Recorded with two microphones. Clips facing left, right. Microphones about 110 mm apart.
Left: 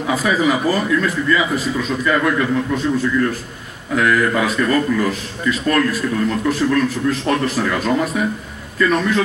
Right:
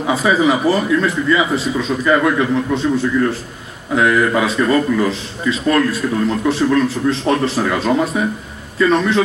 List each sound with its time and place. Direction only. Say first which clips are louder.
0.0 s speech: right 3 dB; 30° right (ahead or behind)